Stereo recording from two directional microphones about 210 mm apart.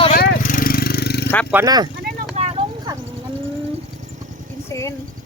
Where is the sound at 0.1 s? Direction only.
40° left (ahead or behind).